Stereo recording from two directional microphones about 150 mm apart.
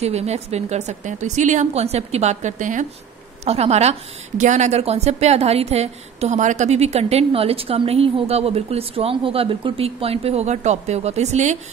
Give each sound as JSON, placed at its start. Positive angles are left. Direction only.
{"t": 0.0, "sound": "a woman's voice", "side_deg": -45}
{"t": 3.4, "sound": "a woman's voice", "side_deg": -45}